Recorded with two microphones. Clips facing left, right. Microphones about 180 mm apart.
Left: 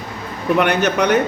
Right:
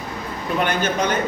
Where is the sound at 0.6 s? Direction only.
70° left (ahead or behind).